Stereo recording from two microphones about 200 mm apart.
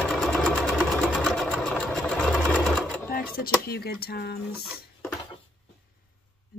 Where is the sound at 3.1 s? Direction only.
50° left (ahead or behind).